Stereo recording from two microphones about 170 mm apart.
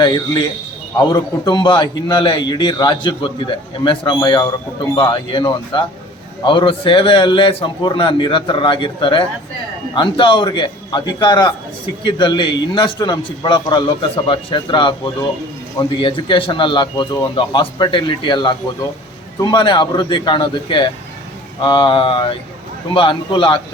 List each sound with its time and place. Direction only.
0.0 s a man's voice: 25° left (ahead or behind)